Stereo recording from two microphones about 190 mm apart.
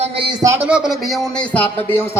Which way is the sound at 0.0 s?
30° right (ahead or behind).